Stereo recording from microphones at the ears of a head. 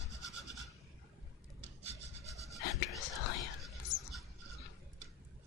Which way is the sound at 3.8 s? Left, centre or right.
Left.